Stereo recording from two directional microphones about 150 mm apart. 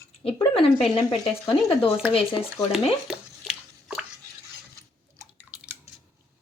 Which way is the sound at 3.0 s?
5° right (ahead or behind).